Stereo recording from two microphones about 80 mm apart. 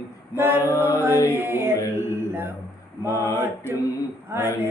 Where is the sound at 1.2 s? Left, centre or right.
Right.